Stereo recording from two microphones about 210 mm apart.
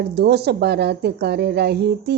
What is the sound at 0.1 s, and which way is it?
A woman's voice, 50° right (ahead or behind).